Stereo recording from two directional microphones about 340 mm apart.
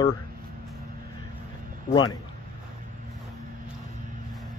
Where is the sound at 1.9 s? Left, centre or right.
Centre.